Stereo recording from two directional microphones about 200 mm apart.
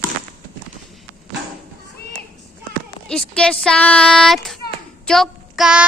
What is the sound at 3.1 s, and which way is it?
Speech, 5° left (ahead or behind).